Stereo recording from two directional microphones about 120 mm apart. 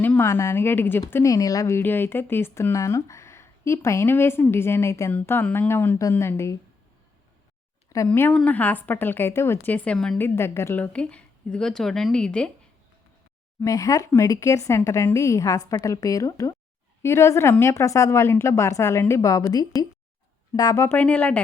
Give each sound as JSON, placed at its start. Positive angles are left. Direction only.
{"t": 0.0, "sound": "a woman's voice", "side_deg": 15}
{"t": 8.0, "sound": "a woman's voice", "side_deg": 15}
{"t": 10.2, "sound": "speech", "side_deg": 20}
{"t": 10.9, "sound": "a woman's voice", "side_deg": 10}
{"t": 13.7, "sound": "speech", "side_deg": 30}
{"t": 21.0, "sound": "a woman's voice", "side_deg": 10}